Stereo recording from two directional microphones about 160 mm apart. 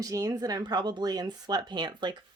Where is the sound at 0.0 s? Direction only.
20° right (ahead or behind).